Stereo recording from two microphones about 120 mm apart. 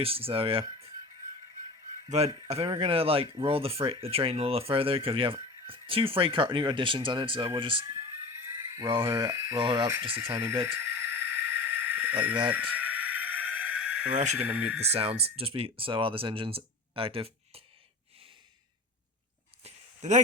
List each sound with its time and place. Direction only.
0.0 s speech: 50° right (ahead or behind)
2.0 s speech: 65° right (ahead or behind)
2.3 s speech: 50° right (ahead or behind)
8.5 s a sound: 30° right (ahead or behind)
8.9 s speech: 45° right (ahead or behind)
9.1 s speech: 25° right (ahead or behind)
10.3 s a sound: 25° right (ahead or behind); by 14.2 s 10° right (ahead or behind)
14.3 s speech: 10° right (ahead or behind)
15.4 s speech: 50° right (ahead or behind)
19.6 s a sound: 75° right (ahead or behind)